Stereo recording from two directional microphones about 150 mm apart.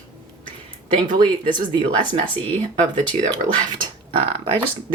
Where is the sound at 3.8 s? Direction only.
35° right (ahead or behind).